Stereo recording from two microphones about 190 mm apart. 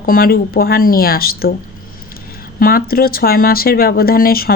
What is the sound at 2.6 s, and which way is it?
Speech, 50° left (ahead or behind).